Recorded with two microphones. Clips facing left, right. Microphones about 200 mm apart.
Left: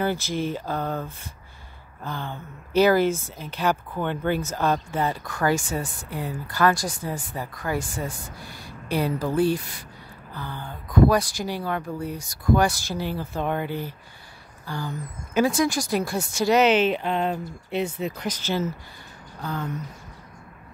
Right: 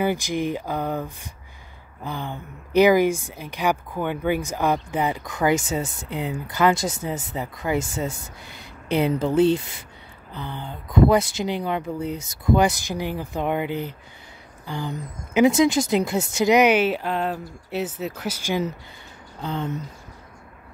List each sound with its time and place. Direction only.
0.0 s speech: 15° right (ahead or behind)